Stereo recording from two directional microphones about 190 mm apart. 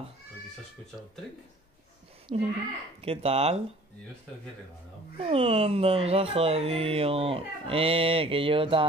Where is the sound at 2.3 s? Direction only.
35° right (ahead or behind).